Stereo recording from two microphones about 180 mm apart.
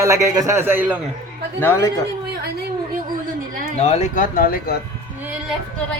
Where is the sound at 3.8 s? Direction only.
40° left (ahead or behind).